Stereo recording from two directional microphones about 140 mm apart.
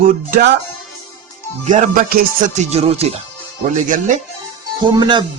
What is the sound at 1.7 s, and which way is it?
Music, 75° right (ahead or behind).